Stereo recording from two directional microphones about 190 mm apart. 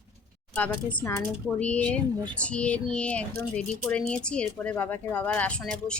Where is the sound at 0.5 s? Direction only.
10° left (ahead or behind).